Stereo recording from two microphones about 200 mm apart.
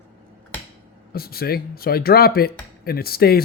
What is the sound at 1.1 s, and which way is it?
Speech, 50° left (ahead or behind).